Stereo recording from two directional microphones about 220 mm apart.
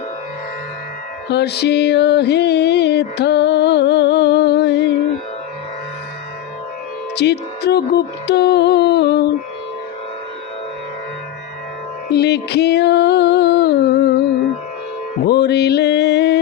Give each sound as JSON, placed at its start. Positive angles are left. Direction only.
{"t": 1.3, "sound": "music", "side_deg": 50}
{"t": 7.2, "sound": "a sound", "side_deg": 50}
{"t": 12.1, "sound": "music", "side_deg": 50}
{"t": 15.3, "sound": "music", "side_deg": 50}